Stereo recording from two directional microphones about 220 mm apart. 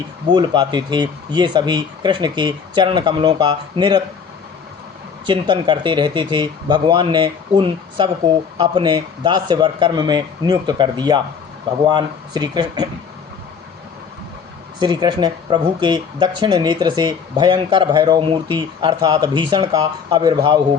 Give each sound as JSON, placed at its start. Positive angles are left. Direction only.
{"t": 0.3, "sound": "speech", "side_deg": -20}
{"t": 5.2, "sound": "speech", "side_deg": -20}
{"t": 14.8, "sound": "speech", "side_deg": -20}